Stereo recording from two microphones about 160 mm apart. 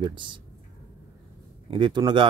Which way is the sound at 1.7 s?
30° right (ahead or behind).